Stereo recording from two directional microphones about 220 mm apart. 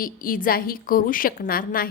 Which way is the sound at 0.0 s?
40° left (ahead or behind).